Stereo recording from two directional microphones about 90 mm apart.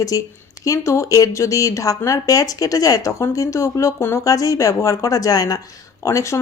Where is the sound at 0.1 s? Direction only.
40° left (ahead or behind).